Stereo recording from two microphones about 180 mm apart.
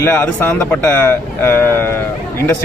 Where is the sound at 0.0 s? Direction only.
10° left (ahead or behind).